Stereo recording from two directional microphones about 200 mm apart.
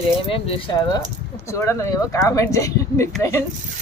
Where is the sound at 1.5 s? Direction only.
15° left (ahead or behind).